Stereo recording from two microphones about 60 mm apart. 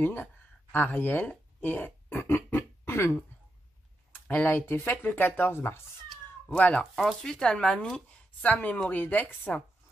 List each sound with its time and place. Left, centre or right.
0.0 s speech: left
4.4 s speech: left
6.5 s speech: left
7.0 s speech: centre; by 9.4 s left